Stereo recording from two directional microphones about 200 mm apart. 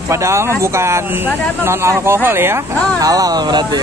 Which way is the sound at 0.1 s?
15° right (ahead or behind).